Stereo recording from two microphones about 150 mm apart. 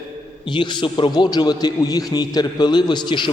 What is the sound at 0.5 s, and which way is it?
A man's voice, 30° left (ahead or behind).